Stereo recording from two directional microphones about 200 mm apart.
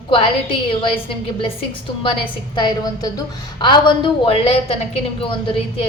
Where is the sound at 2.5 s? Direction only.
25° left (ahead or behind).